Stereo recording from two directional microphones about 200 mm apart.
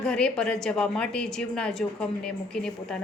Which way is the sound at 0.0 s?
5° left (ahead or behind).